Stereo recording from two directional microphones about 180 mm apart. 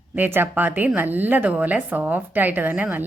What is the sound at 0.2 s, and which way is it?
A woman's voice, 10° right (ahead or behind).